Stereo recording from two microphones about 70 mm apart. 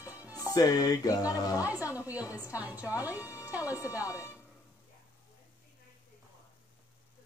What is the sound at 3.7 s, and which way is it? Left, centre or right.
Speech, left.